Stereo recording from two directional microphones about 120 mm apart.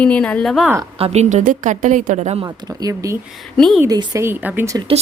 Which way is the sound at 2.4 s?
30° right (ahead or behind).